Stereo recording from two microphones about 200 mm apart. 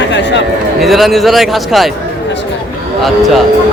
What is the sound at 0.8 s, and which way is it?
A man's voice, centre (ahead or behind).